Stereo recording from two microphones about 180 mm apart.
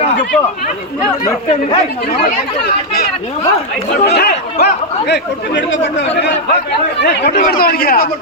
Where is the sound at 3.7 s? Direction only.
60° left (ahead or behind); by 5.8 s 80° left.